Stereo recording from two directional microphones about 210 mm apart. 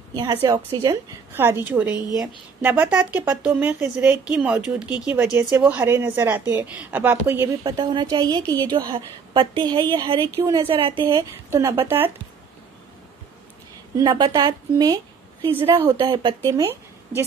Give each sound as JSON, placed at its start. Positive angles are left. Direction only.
{"t": 0.1, "sound": "a woman's voice", "side_deg": -20}
{"t": 13.9, "sound": "a woman's voice", "side_deg": -20}